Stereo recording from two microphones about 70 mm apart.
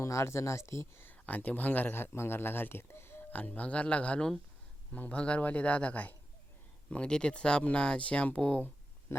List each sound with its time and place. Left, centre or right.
0.0 s speech: left
1.3 s speech: left
3.3 s speech: left